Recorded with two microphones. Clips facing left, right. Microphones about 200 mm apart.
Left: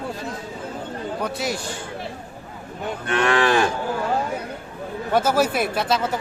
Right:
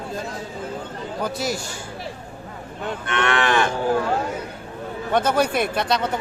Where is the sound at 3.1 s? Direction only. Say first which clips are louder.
Left 2 dB; 35° left (ahead or behind).